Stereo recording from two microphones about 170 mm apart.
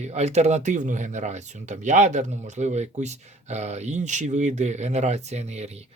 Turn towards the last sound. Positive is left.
turn(degrees=-40)  # may be behind; listen again after turning